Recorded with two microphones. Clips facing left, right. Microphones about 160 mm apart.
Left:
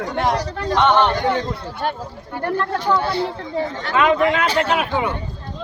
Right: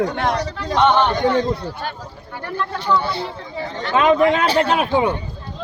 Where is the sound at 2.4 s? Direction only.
50° left (ahead or behind).